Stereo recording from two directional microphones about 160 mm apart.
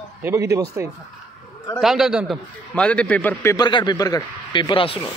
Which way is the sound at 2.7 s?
5° left (ahead or behind).